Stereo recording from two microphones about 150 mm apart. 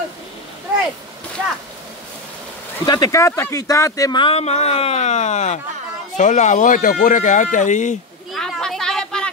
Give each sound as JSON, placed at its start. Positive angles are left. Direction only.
{"t": 2.8, "sound": "speech", "side_deg": 25}
{"t": 4.2, "sound": "speech", "side_deg": 40}
{"t": 8.3, "sound": "a sound", "side_deg": 0}